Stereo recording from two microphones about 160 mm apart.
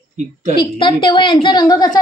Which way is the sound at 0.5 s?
30° left (ahead or behind).